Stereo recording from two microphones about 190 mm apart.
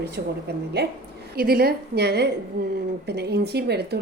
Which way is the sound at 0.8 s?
60° right (ahead or behind).